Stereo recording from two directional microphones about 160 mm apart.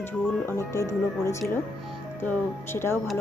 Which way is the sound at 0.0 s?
15° left (ahead or behind).